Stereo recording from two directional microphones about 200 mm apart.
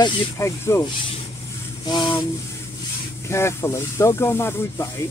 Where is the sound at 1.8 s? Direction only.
20° left (ahead or behind).